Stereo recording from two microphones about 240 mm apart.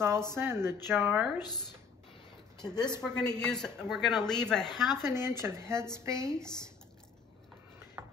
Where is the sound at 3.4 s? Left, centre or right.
Centre.